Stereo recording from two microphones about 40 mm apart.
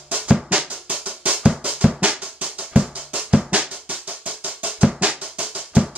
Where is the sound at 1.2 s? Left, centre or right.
Right.